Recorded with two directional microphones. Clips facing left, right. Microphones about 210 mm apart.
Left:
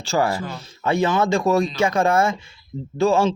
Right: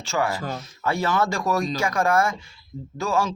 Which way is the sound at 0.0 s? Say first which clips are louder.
Left 4 dB; 35° left (ahead or behind).